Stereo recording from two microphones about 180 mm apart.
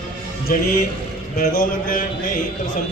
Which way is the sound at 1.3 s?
45° left (ahead or behind).